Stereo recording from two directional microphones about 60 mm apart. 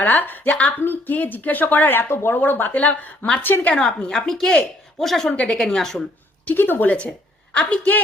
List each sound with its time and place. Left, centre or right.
0.0 s a woman's voice: left
3.8 s speech: centre
6.4 s speech: left
7.5 s a woman's voice: centre